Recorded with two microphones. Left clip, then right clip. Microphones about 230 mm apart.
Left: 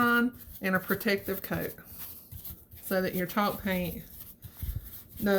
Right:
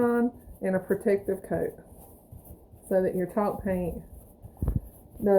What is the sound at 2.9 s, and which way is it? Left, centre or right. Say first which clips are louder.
Speech: right 4 dB; left.